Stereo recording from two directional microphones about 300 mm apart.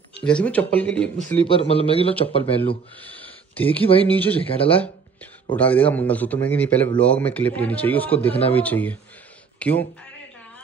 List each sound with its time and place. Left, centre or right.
0.2 s speech: centre
1.4 s a man's voice: centre
3.0 s a sound: centre
3.8 s a man's voice: centre
4.1 s speech: centre
4.5 s a man's voice: centre
4.7 s a sound: centre
5.6 s speech: centre